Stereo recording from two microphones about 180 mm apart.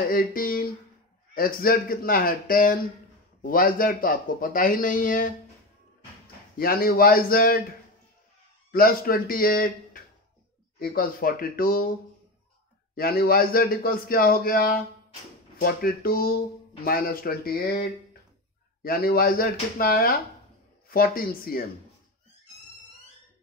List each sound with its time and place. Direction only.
0.1 s a sound: 50° left (ahead or behind)
1.3 s speech: 55° left (ahead or behind)
6.6 s a man's voice: 55° left (ahead or behind)
8.7 s speech: 55° left (ahead or behind)
12.9 s a man's voice: 55° left (ahead or behind)
18.8 s a man's voice: 55° left (ahead or behind)